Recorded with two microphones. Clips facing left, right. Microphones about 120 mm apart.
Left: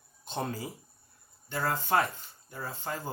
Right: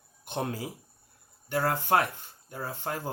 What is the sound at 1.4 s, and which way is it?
Speech, 65° right (ahead or behind).